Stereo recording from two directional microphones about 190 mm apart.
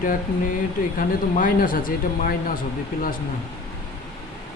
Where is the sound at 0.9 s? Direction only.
45° left (ahead or behind).